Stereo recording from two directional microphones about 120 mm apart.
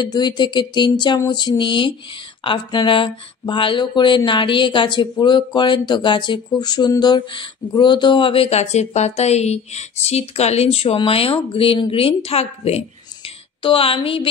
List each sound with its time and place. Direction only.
0.0 s speech: 35° left (ahead or behind)